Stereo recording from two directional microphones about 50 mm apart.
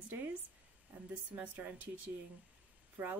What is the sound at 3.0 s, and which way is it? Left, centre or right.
Speech, right.